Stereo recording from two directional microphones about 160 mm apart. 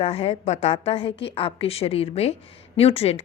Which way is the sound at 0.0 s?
35° left (ahead or behind).